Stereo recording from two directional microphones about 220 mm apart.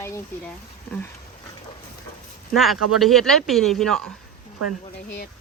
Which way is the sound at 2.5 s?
Centre (ahead or behind).